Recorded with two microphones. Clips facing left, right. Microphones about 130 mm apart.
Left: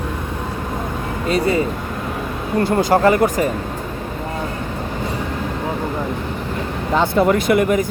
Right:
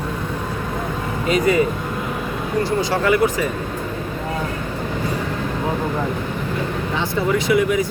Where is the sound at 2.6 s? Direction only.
50° left (ahead or behind).